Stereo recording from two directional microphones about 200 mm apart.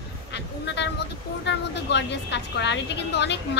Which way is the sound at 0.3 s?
60° left (ahead or behind).